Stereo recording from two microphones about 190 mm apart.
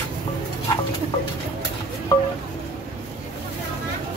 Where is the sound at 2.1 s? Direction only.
20° left (ahead or behind).